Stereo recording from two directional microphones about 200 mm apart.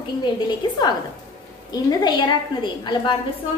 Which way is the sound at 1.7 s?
20° left (ahead or behind).